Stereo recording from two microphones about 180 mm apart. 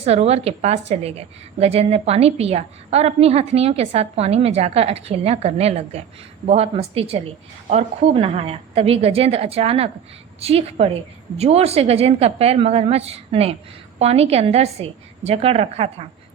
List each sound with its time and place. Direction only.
0.0 s a woman's voice: 35° right (ahead or behind)